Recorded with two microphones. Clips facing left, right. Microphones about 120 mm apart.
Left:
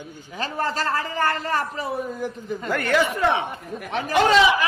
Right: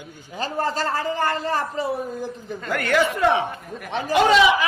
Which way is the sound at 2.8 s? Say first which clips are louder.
Right 1 dB; 15° left (ahead or behind).